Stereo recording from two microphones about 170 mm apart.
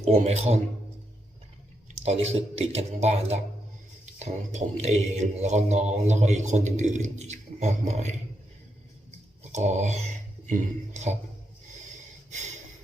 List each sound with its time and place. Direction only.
0.0 s a man's voice: 40° right (ahead or behind)
2.0 s a man's voice: 35° right (ahead or behind)
9.4 s speech: 45° right (ahead or behind)